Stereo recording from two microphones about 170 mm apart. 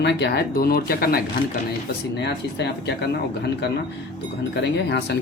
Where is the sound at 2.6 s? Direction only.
80° left.